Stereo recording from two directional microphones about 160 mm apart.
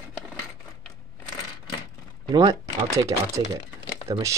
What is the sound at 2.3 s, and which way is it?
Speech, 25° right (ahead or behind).